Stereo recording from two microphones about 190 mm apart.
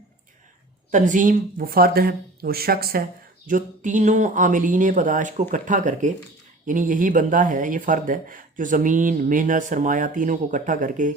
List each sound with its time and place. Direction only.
0.9 s speech: 40° right (ahead or behind)